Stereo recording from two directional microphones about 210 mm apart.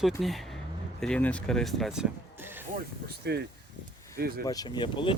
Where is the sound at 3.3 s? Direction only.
50° right (ahead or behind).